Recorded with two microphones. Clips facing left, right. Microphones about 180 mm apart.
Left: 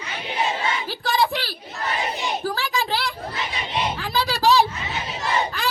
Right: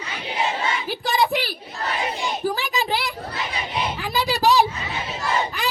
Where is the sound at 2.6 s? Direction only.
20° right (ahead or behind).